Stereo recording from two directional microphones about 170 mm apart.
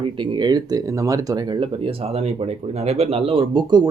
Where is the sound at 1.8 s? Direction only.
35° right (ahead or behind).